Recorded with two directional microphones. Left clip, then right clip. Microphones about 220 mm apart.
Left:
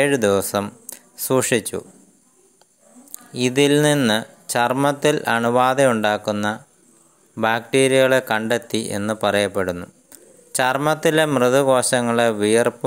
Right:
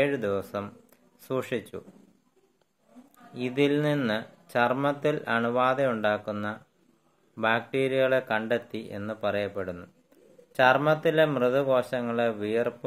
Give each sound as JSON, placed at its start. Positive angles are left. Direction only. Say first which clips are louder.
{"t": 0.0, "sound": "speech", "louder": "left 9 dB", "side_deg": 45}
{"t": 3.3, "sound": "speech", "louder": "left 9 dB", "side_deg": 45}